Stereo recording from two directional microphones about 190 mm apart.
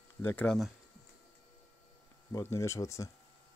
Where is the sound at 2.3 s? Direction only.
15° left (ahead or behind).